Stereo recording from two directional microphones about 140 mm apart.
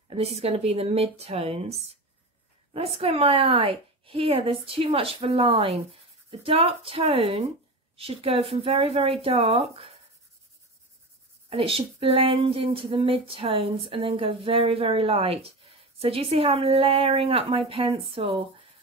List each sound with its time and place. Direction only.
0.1 s a woman's voice: 45° right (ahead or behind)
3.0 s a woman's voice: 40° right (ahead or behind)
11.5 s speech: 40° right (ahead or behind)